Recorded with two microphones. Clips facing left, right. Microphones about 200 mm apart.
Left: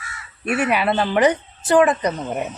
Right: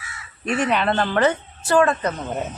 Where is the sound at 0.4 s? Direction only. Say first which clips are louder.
Left 1 dB; 10° left (ahead or behind).